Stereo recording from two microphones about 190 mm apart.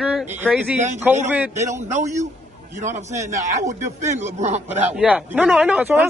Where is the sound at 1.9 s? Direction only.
35° right (ahead or behind).